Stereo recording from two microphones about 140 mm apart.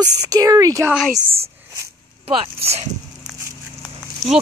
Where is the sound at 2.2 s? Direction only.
45° right (ahead or behind).